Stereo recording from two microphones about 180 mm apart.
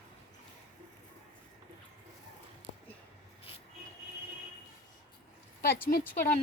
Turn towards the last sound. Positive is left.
turn(degrees=50)  # may be behind; listen again after turning